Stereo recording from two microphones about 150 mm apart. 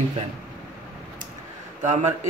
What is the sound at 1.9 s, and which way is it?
Speech, 50° right (ahead or behind).